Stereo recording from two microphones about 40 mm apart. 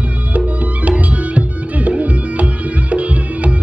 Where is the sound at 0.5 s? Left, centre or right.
Right.